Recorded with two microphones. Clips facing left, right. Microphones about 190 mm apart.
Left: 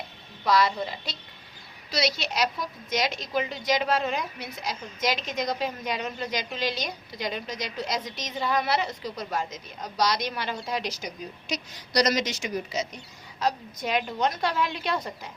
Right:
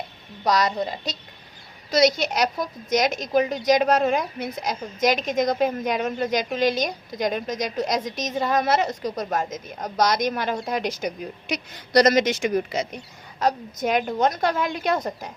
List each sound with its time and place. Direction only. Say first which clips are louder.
0.4 s a woman's voice: right 2 dB; 45° right (ahead or behind)